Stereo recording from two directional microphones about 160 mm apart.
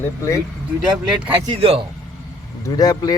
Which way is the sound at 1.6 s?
35° right (ahead or behind).